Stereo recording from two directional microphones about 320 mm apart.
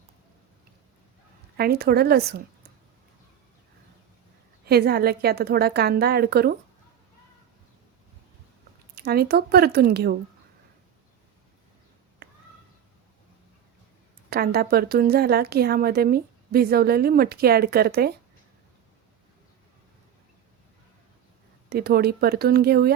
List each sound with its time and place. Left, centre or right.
1.5 s a woman's voice: right
4.6 s a woman's voice: right
9.0 s a woman's voice: right
14.3 s a woman's voice: right
21.7 s a woman's voice: right